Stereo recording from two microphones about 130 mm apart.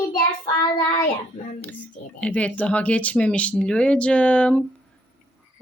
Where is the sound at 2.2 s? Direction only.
10° left (ahead or behind).